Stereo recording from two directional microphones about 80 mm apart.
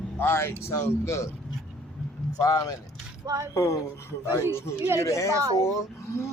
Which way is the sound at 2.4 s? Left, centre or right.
Left.